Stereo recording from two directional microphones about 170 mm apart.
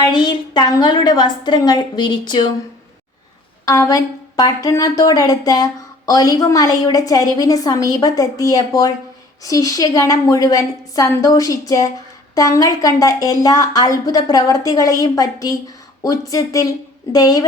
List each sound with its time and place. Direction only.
0.0 s speech: 25° left (ahead or behind)
3.7 s speech: 20° left (ahead or behind)